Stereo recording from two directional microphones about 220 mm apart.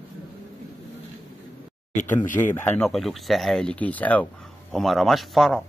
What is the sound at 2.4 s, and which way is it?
Speech, 10° left (ahead or behind).